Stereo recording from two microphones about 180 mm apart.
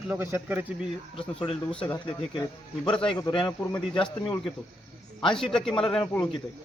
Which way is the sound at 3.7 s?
10° left (ahead or behind).